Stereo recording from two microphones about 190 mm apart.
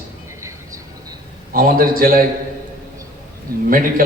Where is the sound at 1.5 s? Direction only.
50° right (ahead or behind).